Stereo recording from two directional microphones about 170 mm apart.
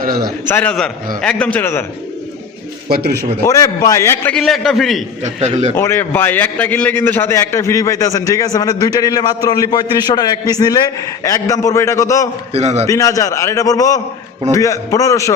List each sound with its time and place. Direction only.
0.4 s a man's voice: 10° left (ahead or behind)
2.9 s a man's voice: 70° right (ahead or behind)
3.4 s a man's voice: 20° left (ahead or behind)
4.4 s a man's voice: centre (ahead or behind)
5.2 s a man's voice: 40° right (ahead or behind)
5.7 s a man's voice: 15° left (ahead or behind)
12.5 s a man's voice: 40° right (ahead or behind)
12.9 s a man's voice: 20° left (ahead or behind)